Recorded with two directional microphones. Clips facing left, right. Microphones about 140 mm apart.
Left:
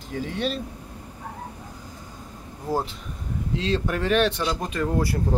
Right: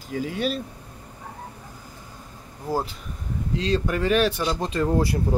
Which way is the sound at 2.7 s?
Centre (ahead or behind).